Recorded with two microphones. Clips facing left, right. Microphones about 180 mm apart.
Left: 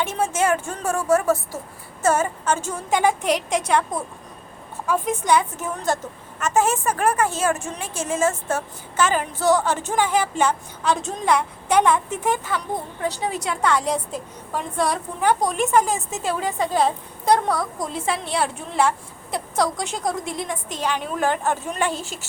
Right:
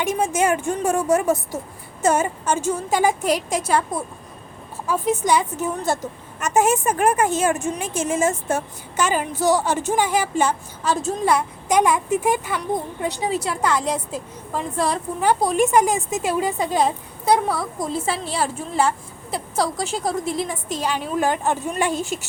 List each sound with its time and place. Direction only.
0.0 s a woman's voice: 15° right (ahead or behind)